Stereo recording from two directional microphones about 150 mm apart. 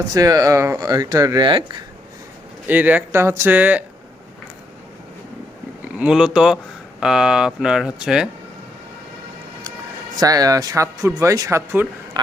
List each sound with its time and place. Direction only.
0.1 s speech: 25° right (ahead or behind)
2.6 s speech: 10° right (ahead or behind)
5.8 s speech: 5° right (ahead or behind)
10.2 s speech: 25° right (ahead or behind)